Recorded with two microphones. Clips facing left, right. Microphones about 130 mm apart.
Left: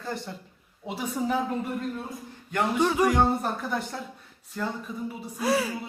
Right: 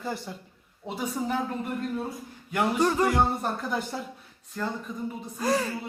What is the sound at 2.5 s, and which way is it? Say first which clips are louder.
Speech: even; 5° right (ahead or behind).